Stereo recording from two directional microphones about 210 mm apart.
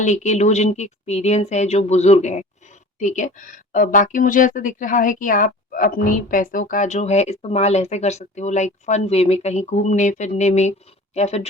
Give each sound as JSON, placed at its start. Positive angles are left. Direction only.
{"t": 0.0, "sound": "speech", "side_deg": 35}